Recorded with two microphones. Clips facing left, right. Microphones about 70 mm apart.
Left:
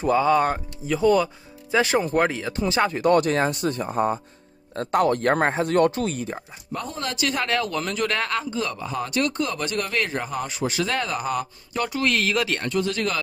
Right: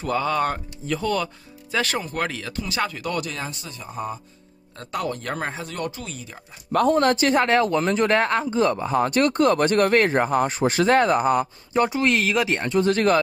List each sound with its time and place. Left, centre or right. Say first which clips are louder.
0.0 s speech: left 4 dB; centre; by 6.4 s left
6.7 s speech: right 12 dB; right
7.2 s speech: right 6 dB; right
12.8 s speech: right 7 dB; right